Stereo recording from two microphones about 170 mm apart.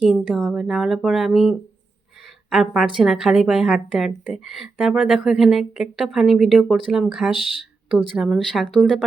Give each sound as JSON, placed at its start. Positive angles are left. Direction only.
{"t": 0.0, "sound": "a woman's voice", "side_deg": 0}